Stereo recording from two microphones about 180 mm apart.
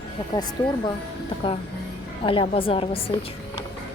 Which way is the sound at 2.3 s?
30° left (ahead or behind).